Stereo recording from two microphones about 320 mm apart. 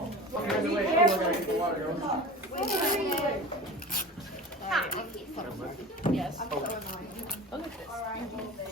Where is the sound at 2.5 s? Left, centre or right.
Left.